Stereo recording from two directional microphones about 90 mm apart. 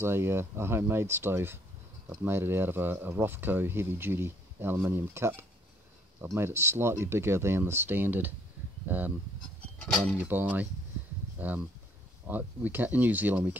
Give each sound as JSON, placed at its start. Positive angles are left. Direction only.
{"t": 0.0, "sound": "speech", "side_deg": -25}
{"t": 10.1, "sound": "speech", "side_deg": -20}